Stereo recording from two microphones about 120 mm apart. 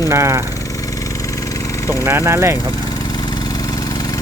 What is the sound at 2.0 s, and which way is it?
Speech, 20° right (ahead or behind).